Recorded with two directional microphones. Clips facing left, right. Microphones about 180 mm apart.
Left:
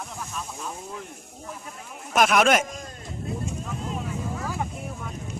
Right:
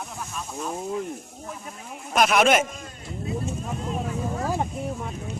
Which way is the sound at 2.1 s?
Centre (ahead or behind).